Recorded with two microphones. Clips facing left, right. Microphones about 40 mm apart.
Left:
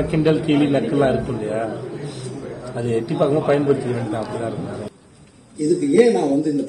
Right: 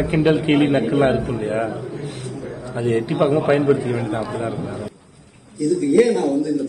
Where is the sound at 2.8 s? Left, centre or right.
Right.